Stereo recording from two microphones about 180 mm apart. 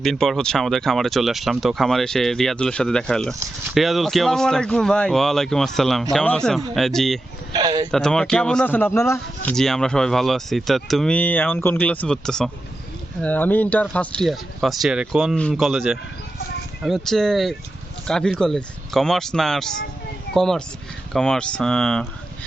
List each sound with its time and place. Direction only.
0.0 s speech: centre (ahead or behind)
7.5 s speech: 25° right (ahead or behind)
7.9 s speech: 5° left (ahead or behind)
9.5 s speech: 5° left (ahead or behind)